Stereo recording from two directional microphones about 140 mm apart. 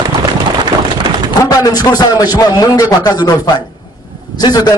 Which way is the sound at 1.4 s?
25° left (ahead or behind).